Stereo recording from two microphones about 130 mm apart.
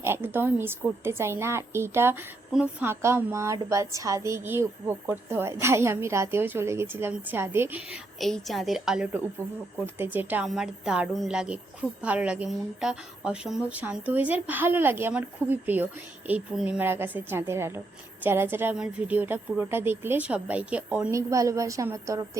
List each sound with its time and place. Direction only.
0.0 s a woman's voice: 15° right (ahead or behind)
2.5 s a woman's voice: 5° right (ahead or behind)
2.8 s a woman's voice: 20° right (ahead or behind)
9.8 s a woman's voice: 15° right (ahead or behind)
10.4 s a woman's voice: 5° right (ahead or behind)
21.1 s a woman's voice: 25° right (ahead or behind)